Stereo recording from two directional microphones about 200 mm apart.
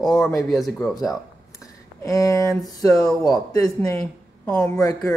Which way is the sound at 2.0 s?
15° left (ahead or behind).